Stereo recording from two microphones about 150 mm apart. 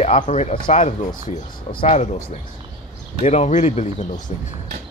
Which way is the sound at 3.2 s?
50° left (ahead or behind).